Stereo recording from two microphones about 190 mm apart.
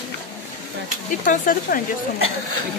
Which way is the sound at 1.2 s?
45° left (ahead or behind).